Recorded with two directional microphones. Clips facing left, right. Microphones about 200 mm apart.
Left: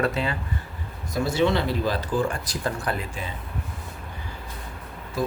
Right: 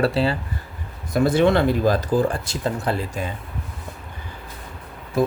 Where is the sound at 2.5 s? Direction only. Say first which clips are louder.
Right 4 dB; 25° right (ahead or behind).